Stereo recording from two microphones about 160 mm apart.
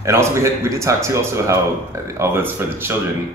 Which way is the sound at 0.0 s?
15° right (ahead or behind).